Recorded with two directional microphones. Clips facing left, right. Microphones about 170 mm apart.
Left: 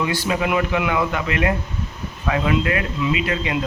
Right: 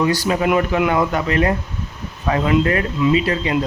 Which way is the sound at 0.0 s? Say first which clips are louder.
Right 4 dB; 40° right (ahead or behind).